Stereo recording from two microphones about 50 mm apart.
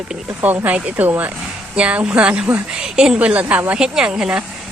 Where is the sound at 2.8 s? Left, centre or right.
Centre.